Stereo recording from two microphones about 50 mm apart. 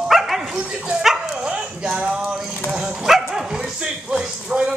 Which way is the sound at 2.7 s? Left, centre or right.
Centre.